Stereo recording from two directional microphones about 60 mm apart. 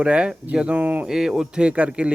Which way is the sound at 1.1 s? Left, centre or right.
Centre.